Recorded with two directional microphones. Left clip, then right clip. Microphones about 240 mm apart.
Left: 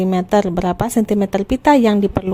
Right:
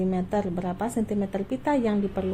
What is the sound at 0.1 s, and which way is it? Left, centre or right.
A woman's voice, left.